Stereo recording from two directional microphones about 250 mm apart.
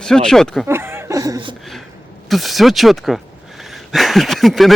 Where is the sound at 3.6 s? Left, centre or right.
Centre.